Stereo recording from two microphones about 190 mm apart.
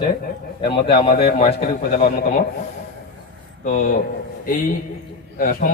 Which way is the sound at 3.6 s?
45° left (ahead or behind).